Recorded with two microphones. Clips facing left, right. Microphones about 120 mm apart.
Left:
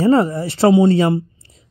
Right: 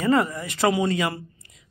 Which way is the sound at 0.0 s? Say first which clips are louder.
Left 7 dB; 35° left (ahead or behind).